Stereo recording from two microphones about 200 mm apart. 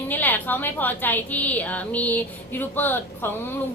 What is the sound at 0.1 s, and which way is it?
A woman's voice, 10° left (ahead or behind).